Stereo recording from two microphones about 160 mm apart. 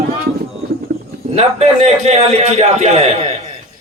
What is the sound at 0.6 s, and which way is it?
Clip-clop, 75° right (ahead or behind).